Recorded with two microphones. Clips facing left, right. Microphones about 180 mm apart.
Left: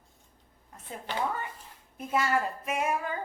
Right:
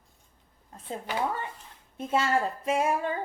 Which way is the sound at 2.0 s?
25° right (ahead or behind).